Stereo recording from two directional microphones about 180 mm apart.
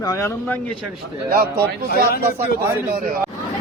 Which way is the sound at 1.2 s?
60° right (ahead or behind).